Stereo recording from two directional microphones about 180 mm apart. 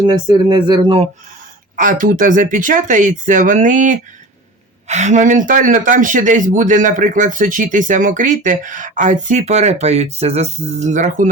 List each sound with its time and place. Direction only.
0.0 s speech: 25° right (ahead or behind)
1.7 s speech: 45° right (ahead or behind)